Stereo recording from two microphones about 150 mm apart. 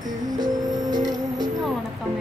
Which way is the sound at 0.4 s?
25° right (ahead or behind).